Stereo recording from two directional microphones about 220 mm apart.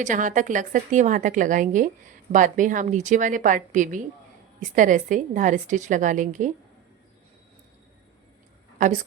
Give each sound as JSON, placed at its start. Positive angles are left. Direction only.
{"t": 0.0, "sound": "a woman's voice", "side_deg": -35}
{"t": 8.8, "sound": "a woman's voice", "side_deg": -35}